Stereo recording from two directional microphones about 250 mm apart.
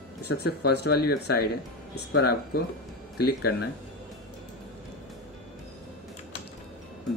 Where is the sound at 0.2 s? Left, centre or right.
Left.